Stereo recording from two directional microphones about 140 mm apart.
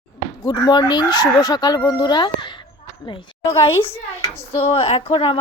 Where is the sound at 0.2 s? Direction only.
30° left (ahead or behind).